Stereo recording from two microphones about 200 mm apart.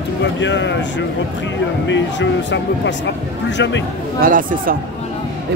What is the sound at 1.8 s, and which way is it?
Speech, 65° left (ahead or behind).